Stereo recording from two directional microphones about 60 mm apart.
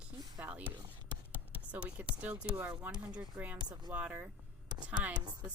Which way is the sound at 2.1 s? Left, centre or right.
Right.